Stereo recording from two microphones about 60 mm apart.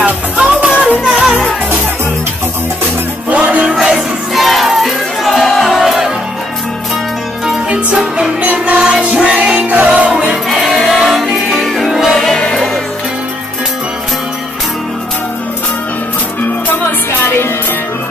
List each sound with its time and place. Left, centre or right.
0.0 s music: right
3.3 s music: right
3.7 s music: centre
7.4 s music: centre
10.6 s music: centre